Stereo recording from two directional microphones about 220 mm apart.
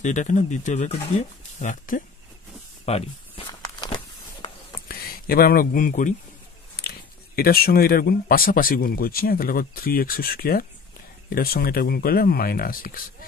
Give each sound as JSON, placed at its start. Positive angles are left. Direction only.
{"t": 0.0, "sound": "speech", "side_deg": 35}
{"t": 2.8, "sound": "walk", "side_deg": 25}
{"t": 4.8, "sound": "speech", "side_deg": 40}
{"t": 6.8, "sound": "a sound", "side_deg": 45}
{"t": 7.3, "sound": "speech", "side_deg": 45}